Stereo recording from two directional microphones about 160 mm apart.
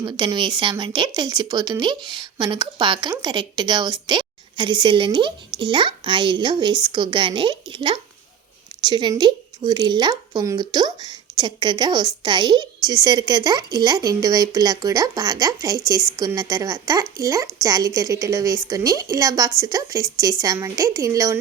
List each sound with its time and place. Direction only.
0.0 s a woman's voice: 30° right (ahead or behind)